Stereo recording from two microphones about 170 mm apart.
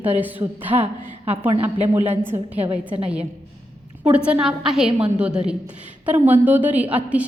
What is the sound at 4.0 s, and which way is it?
A woman's voice, 5° right (ahead or behind).